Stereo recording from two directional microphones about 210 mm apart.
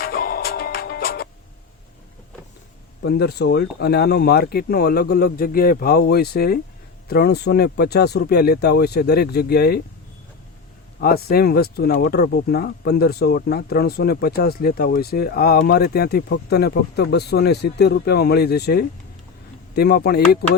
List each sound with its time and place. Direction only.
0.0 s music: 45° left (ahead or behind)
3.0 s speech: 50° left (ahead or behind)
11.0 s speech: 45° left (ahead or behind)